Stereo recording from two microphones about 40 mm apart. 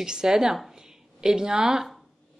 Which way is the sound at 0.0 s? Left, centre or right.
Centre.